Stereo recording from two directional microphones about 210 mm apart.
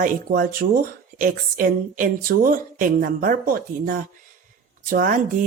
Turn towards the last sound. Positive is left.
turn(degrees=-40)  # may be behind; listen again after turning